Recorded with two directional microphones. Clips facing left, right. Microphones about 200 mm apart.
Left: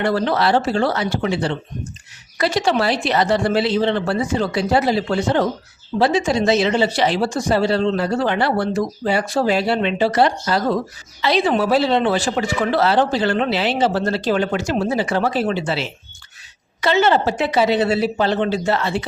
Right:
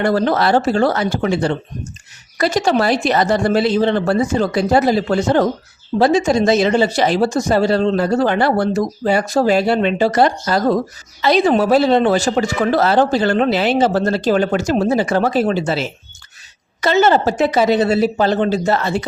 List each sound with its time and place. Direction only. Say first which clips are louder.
0.0 s speech: right 3 dB; 45° right (ahead or behind)